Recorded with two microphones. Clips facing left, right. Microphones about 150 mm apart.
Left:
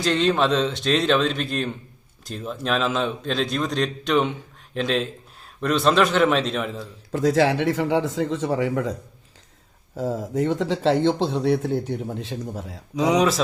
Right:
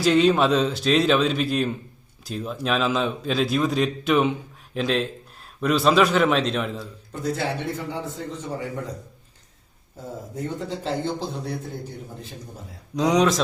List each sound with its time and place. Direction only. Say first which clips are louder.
0.0 s a man's voice: right 2 dB; 5° right (ahead or behind)
7.1 s speech: left 8 dB; 90° left
9.9 s speech: left 9 dB; 90° left
13.0 s a man's voice: even; 5° left (ahead or behind)